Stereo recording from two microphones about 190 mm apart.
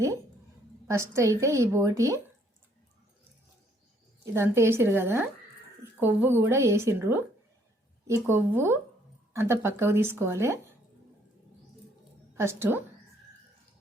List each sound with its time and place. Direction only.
0.9 s a woman's voice: 15° right (ahead or behind)
4.4 s a woman's voice: 10° right (ahead or behind)
12.3 s a woman's voice: 15° right (ahead or behind)